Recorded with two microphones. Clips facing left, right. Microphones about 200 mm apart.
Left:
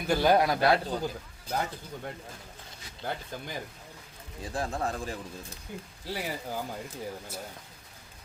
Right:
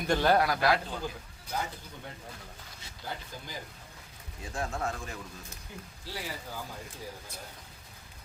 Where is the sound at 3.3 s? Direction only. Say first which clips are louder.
Left 6 dB; 55° left (ahead or behind).